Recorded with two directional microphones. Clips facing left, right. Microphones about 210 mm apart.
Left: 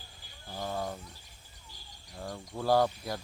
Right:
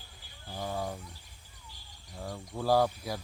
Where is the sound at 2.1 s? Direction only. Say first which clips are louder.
Even; 5° right (ahead or behind).